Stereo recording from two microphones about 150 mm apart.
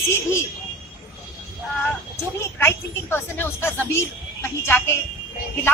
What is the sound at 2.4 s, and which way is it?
A woman's voice, 15° left (ahead or behind).